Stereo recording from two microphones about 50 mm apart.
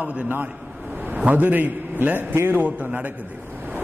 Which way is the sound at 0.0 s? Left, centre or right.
Right.